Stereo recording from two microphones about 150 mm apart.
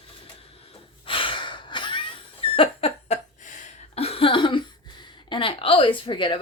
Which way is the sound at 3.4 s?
55° left (ahead or behind).